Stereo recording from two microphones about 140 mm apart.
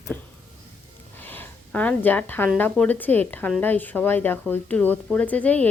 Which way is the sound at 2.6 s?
10° left (ahead or behind).